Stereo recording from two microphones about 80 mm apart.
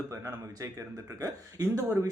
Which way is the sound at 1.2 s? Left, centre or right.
Right.